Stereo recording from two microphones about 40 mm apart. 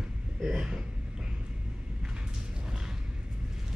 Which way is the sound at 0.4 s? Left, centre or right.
Centre.